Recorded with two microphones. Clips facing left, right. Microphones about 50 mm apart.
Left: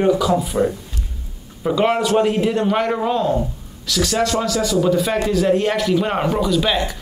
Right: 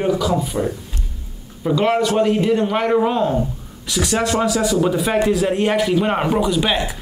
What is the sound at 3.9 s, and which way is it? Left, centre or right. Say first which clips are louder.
Speech: even; centre.